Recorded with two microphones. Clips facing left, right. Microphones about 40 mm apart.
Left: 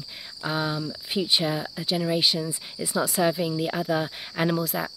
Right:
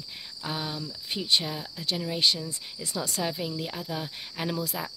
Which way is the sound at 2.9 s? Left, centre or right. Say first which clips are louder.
Left 8 dB; centre.